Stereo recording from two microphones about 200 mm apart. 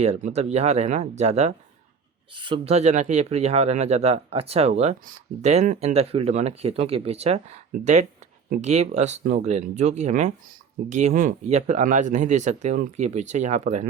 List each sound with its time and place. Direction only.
0.0 s speech: 35° right (ahead or behind)